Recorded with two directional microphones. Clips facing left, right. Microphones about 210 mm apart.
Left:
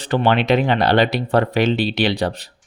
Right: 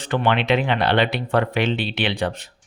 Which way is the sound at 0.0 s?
35° left (ahead or behind).